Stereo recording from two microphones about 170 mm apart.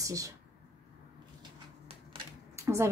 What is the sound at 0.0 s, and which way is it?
Speech, 20° right (ahead or behind).